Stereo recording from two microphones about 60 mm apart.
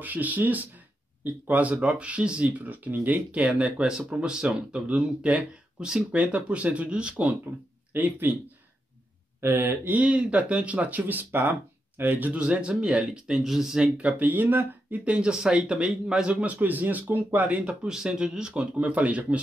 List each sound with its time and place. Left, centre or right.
0.0 s speech: right
7.9 s mantra: right
9.4 s mantra: right
9.9 s speech: centre
12.0 s mantra: right
12.4 s a man's voice: centre
13.4 s a man's voice: centre
13.9 s speech: right
15.0 s a man's voice: centre
17.8 s a man's voice: centre